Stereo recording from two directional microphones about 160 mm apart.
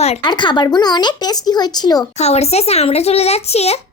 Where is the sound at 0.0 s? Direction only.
40° left (ahead or behind).